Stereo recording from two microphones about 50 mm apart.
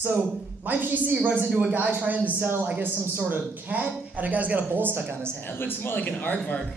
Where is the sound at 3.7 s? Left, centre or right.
Right.